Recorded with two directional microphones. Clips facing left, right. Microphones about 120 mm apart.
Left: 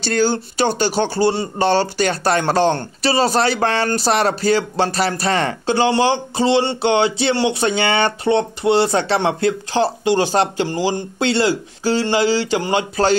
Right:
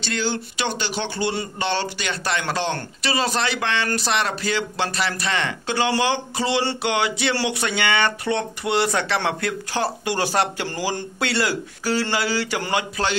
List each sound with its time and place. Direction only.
0.0 s speech: 40° left (ahead or behind)